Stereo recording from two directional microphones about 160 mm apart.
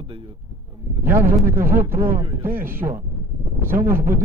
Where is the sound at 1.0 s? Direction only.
15° right (ahead or behind).